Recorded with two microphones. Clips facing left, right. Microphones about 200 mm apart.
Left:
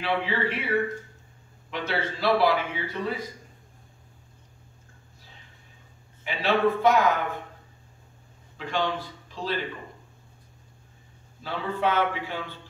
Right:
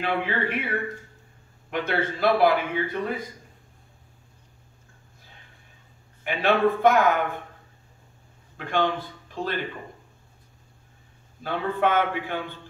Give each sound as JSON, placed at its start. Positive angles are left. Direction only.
{"t": 0.0, "sound": "a man's voice", "side_deg": -50}
{"t": 1.7, "sound": "a man's voice", "side_deg": -50}
{"t": 6.2, "sound": "a man's voice", "side_deg": -55}
{"t": 8.5, "sound": "speech", "side_deg": -55}
{"t": 11.4, "sound": "a man's voice", "side_deg": -55}